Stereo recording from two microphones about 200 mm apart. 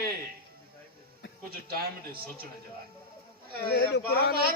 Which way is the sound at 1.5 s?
50° right (ahead or behind).